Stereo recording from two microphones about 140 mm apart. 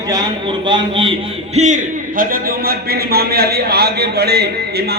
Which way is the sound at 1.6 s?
60° right (ahead or behind).